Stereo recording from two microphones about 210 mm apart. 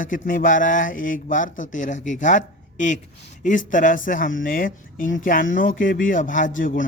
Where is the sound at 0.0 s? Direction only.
40° left (ahead or behind).